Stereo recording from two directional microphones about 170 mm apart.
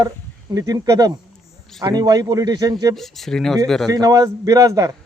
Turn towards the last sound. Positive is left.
turn(degrees=-20)  # may be behind; listen again after turning